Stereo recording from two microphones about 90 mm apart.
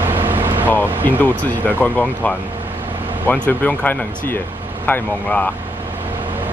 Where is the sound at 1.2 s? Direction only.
20° left (ahead or behind).